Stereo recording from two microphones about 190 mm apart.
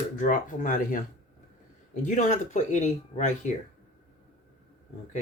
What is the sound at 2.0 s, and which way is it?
Speech, 40° left (ahead or behind).